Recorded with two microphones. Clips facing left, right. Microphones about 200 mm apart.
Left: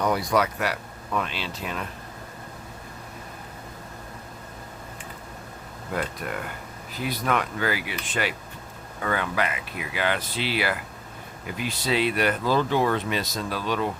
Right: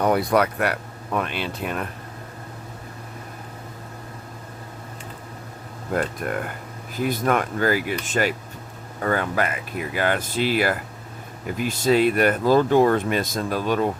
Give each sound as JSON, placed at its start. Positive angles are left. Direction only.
{"t": 0.0, "sound": "speech", "side_deg": -55}
{"t": 5.9, "sound": "speech", "side_deg": -50}